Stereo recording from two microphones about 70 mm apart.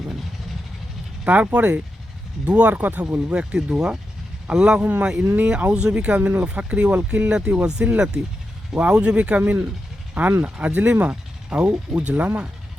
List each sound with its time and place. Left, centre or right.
1.2 s speech: centre